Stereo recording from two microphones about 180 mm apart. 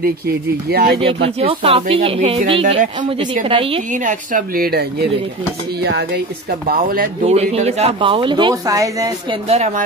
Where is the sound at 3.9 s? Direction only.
45° right (ahead or behind); by 6.2 s 65° right (ahead or behind).